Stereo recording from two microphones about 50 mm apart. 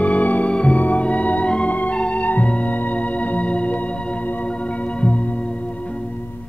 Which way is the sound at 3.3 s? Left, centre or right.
Left.